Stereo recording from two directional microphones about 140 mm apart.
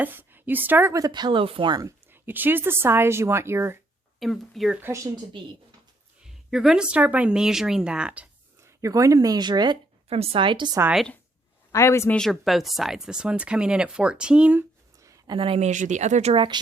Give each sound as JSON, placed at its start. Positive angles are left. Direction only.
{"t": 0.0, "sound": "a woman's voice", "side_deg": -15}
{"t": 1.0, "sound": "speech", "side_deg": -30}
{"t": 2.0, "sound": "speech", "side_deg": -15}
{"t": 4.2, "sound": "speech", "side_deg": 0}
{"t": 6.5, "sound": "speech", "side_deg": 0}
{"t": 8.6, "sound": "speech", "side_deg": -25}
{"t": 10.1, "sound": "speech", "side_deg": -45}
{"t": 10.9, "sound": "speech", "side_deg": 5}
{"t": 11.7, "sound": "speech", "side_deg": 20}
{"t": 12.1, "sound": "speech", "side_deg": 0}
{"t": 14.9, "sound": "a sound", "side_deg": -25}
{"t": 15.4, "sound": "speech", "side_deg": -45}
{"t": 16.3, "sound": "speech", "side_deg": -35}